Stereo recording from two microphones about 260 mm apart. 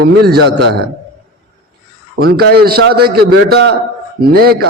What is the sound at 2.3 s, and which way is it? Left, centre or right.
A man's voice, right.